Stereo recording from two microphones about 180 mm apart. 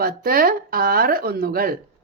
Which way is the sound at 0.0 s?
55° right (ahead or behind).